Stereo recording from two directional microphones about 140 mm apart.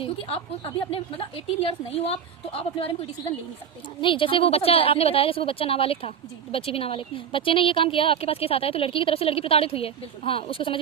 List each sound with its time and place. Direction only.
0.0 s a woman's voice: 45° left (ahead or behind)